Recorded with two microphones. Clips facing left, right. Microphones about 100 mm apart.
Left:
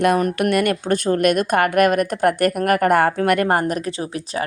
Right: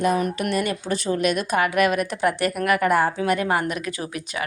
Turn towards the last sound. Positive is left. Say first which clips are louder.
# left 4 dB
turn(degrees=30)  # may be behind; listen again after turning